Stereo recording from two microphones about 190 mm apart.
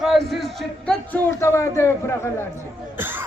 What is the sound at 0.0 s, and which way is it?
A man's voice, centre (ahead or behind).